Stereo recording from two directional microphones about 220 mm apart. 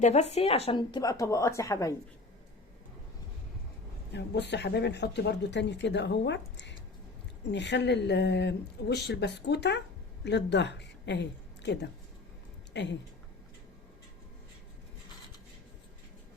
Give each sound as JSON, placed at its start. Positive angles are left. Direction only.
{"t": 0.0, "sound": "a woman's voice", "side_deg": 30}
{"t": 4.1, "sound": "a woman's voice", "side_deg": 50}